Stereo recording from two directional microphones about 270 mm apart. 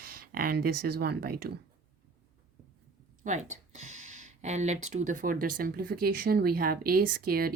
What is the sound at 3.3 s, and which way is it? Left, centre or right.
Speech, right.